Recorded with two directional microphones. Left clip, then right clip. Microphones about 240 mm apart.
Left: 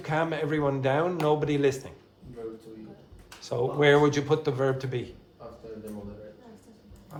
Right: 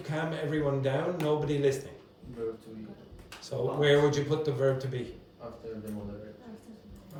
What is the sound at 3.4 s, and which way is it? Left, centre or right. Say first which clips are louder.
Speech: left 4 dB; centre.